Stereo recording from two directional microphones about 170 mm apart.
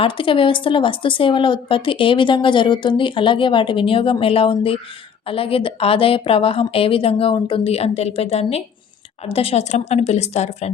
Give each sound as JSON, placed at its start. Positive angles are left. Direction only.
{"t": 0.0, "sound": "speech", "side_deg": 30}